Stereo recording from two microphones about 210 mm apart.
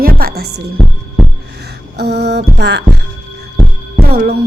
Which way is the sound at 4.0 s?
50° right (ahead or behind).